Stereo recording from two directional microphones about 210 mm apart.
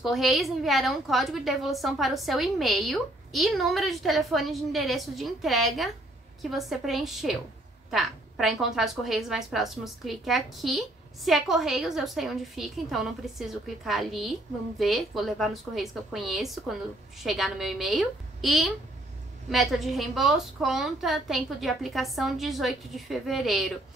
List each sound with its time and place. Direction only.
0.0 s a woman's voice: centre (ahead or behind)